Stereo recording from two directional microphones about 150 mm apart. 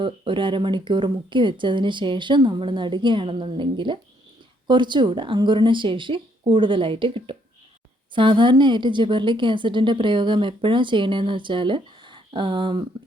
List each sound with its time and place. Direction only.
0.0 s a woman's voice: 35° right (ahead or behind)